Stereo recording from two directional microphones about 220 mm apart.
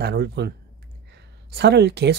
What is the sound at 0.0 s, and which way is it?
Speech, 50° right (ahead or behind).